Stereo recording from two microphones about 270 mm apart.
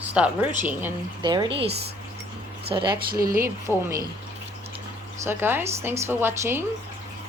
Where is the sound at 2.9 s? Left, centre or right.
Right.